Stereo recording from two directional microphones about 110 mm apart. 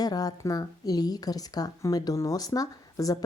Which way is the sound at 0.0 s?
35° left (ahead or behind).